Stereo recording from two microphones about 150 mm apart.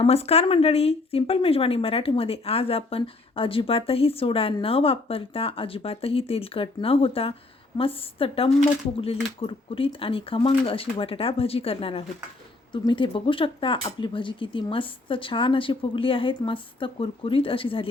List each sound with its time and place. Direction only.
0.0 s speech: 45° left (ahead or behind)